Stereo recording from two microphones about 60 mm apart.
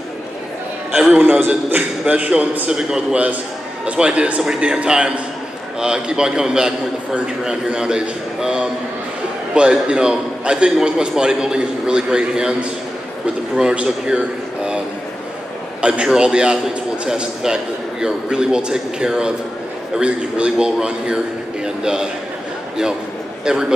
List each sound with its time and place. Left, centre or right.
1.2 s a man's voice: right
2.7 s a man's voice: centre
13.6 s a man's voice: centre
15.8 s a man's voice: centre